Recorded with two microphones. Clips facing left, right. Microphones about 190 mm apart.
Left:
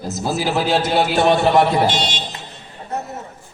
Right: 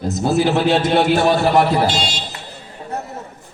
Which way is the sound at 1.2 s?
20° left (ahead or behind).